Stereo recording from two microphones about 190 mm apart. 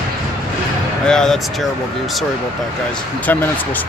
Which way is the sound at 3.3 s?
10° left (ahead or behind).